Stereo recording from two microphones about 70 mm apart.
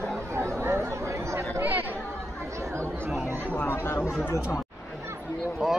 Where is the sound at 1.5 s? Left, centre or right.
Right.